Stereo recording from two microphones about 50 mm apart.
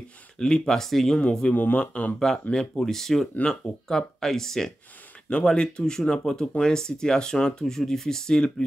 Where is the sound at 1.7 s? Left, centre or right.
Left.